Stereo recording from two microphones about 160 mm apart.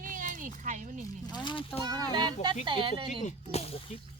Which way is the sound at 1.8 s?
25° right (ahead or behind).